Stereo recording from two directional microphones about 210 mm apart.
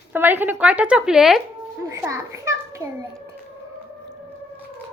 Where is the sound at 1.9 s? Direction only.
15° right (ahead or behind).